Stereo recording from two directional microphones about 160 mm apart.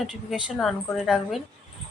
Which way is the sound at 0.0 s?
Centre (ahead or behind).